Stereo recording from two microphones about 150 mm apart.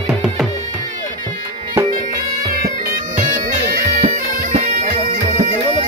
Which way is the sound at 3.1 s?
60° right (ahead or behind).